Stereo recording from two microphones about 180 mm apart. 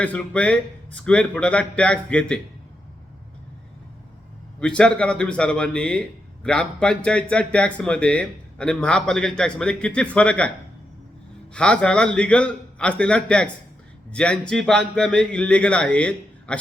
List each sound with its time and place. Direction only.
0.0 s speech: 5° left (ahead or behind)
4.6 s speech: 5° left (ahead or behind)
11.5 s speech: 5° left (ahead or behind)